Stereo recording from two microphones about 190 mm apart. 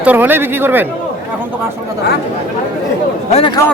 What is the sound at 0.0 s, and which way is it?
Speech, 10° right (ahead or behind).